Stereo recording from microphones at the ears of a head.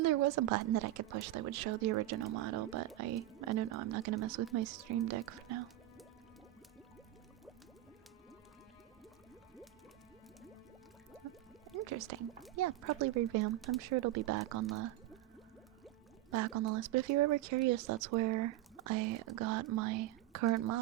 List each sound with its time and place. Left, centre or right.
0.0 s a woman's voice: right
11.2 s music: right
12.5 s a woman's voice: right
16.3 s a woman's voice: right